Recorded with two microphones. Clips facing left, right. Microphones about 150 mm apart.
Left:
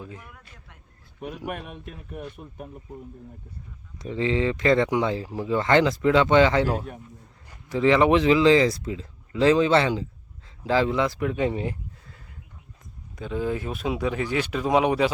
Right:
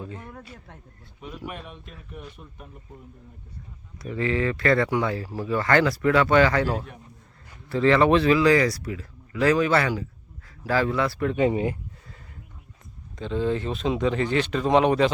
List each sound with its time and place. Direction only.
1.5 s speech: 50° left (ahead or behind)
3.9 s speech: 20° left (ahead or behind)
11.3 s a sound: 5° right (ahead or behind)
13.1 s speech: 10° left (ahead or behind)